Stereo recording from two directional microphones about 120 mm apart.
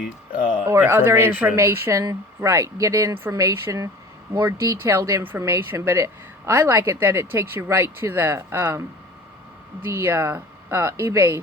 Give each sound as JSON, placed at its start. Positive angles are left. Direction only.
{"t": 0.7, "sound": "a woman's voice", "side_deg": -20}
{"t": 9.8, "sound": "a woman's voice", "side_deg": -20}